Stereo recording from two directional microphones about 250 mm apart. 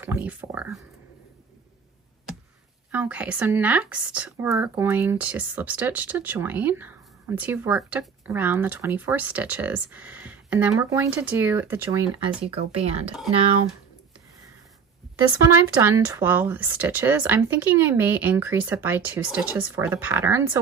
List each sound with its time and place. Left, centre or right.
0.0 s speech: centre
2.9 s speech: centre; by 13.6 s right
15.8 s speech: centre